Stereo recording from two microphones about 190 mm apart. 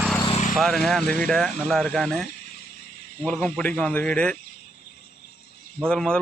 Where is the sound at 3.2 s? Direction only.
5° left (ahead or behind).